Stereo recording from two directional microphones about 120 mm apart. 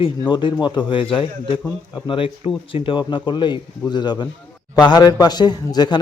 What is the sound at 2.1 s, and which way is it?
A man's voice, 50° left (ahead or behind).